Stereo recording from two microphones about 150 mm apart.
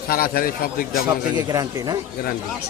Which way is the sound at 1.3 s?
25° right (ahead or behind).